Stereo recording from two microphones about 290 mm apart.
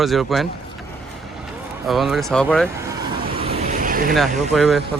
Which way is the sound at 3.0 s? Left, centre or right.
Centre.